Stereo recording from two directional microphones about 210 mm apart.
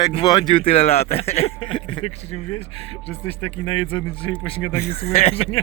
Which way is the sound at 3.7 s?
80° left.